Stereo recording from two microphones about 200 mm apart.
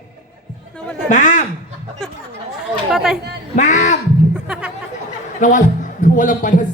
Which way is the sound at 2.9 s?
Centre (ahead or behind).